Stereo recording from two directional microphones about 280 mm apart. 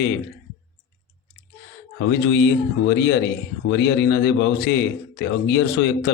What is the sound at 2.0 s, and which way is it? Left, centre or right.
Speech, left.